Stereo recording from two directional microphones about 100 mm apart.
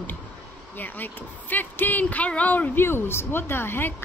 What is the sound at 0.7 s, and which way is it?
A woman's voice, 20° left (ahead or behind).